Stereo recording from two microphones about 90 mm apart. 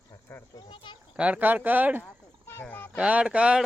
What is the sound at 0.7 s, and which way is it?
Speech, 70° left (ahead or behind).